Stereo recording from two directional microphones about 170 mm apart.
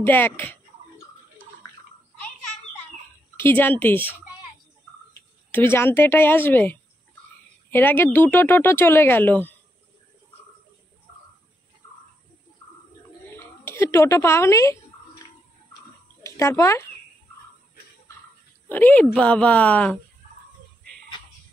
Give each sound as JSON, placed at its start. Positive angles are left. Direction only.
{"t": 0.0, "sound": "speech", "side_deg": 10}
{"t": 3.3, "sound": "speech", "side_deg": 10}
{"t": 5.5, "sound": "speech", "side_deg": 15}
{"t": 13.4, "sound": "speech", "side_deg": 15}
{"t": 16.2, "sound": "speech", "side_deg": 15}
{"t": 18.7, "sound": "speech", "side_deg": 10}